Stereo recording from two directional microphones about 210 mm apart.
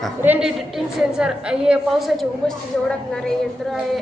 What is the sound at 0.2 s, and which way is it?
A woman's voice, 5° right (ahead or behind).